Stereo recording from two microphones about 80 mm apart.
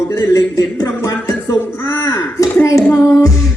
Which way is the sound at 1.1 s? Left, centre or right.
Left.